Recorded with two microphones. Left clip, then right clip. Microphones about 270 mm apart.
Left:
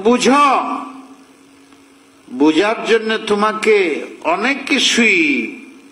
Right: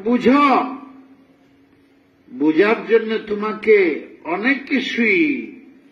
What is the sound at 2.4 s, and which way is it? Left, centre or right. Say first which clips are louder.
A man's voice: left 2 dB; left.